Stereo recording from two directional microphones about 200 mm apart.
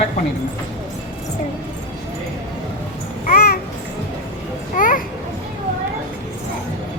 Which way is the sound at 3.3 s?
50° left (ahead or behind).